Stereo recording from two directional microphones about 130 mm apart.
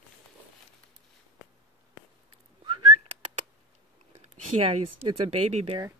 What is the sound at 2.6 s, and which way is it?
Whistling, 40° right (ahead or behind).